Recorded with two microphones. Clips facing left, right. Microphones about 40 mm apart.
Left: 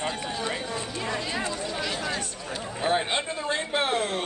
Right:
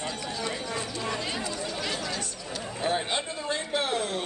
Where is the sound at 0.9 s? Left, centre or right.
Left.